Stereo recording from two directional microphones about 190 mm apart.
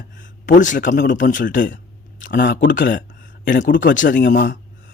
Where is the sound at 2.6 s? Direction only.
45° left (ahead or behind).